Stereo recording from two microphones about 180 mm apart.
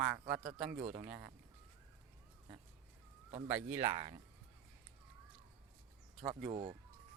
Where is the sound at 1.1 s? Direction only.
10° right (ahead or behind).